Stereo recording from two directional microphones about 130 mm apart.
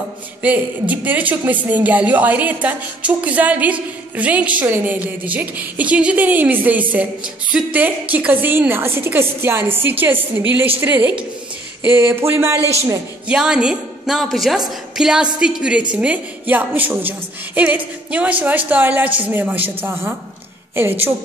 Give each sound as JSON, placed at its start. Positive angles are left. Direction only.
{"t": 0.4, "sound": "speech", "side_deg": -10}
{"t": 13.3, "sound": "a woman's voice", "side_deg": -5}